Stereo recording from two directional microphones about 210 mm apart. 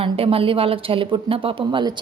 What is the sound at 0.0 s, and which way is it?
Speech, 25° right (ahead or behind).